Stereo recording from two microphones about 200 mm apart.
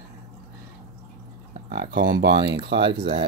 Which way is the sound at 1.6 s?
55° right (ahead or behind).